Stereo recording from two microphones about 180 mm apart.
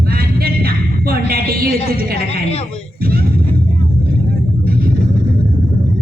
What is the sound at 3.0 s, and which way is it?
Music, 55° right (ahead or behind).